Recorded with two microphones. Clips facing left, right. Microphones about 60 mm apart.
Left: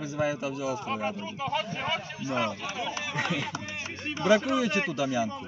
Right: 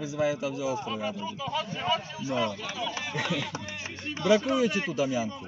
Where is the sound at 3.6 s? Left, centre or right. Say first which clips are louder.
Left 1 dB; left.